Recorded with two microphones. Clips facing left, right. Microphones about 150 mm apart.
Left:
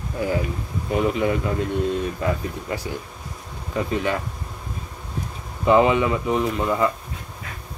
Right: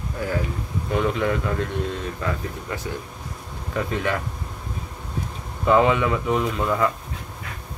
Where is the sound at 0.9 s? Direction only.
10° left (ahead or behind).